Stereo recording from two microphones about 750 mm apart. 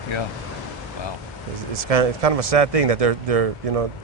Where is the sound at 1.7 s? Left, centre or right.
Right.